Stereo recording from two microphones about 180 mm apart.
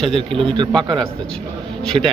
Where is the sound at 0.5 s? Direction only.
25° right (ahead or behind).